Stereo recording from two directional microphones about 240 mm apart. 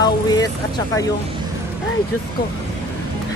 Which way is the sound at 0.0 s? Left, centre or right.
Centre.